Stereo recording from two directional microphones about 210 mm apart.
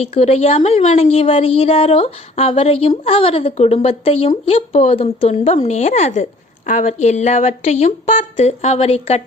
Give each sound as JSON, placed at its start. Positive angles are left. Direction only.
{"t": 0.0, "sound": "a woman's voice", "side_deg": 30}